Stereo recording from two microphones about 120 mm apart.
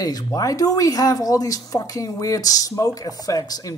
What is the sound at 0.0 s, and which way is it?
A woman's voice, 30° left (ahead or behind).